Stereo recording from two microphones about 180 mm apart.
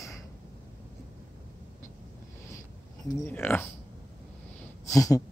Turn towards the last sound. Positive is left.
turn(degrees=20)  # may be behind; listen again after turning